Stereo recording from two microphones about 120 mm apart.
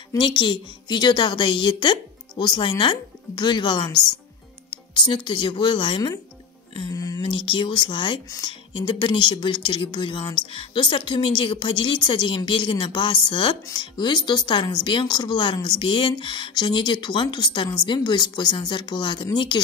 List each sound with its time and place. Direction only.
0.2 s a woman's voice: 40° left (ahead or behind)
7.2 s a woman's voice: 45° left (ahead or behind)